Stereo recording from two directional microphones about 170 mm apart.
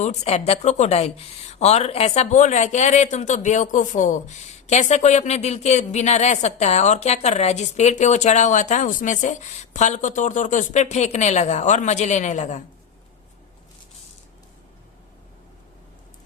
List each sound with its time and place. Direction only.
0.0 s speech: 40° left (ahead or behind)